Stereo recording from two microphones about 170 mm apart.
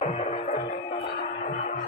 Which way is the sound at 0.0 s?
40° left (ahead or behind).